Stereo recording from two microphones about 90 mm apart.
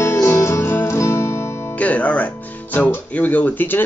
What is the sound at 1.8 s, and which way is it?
Music, 15° left (ahead or behind).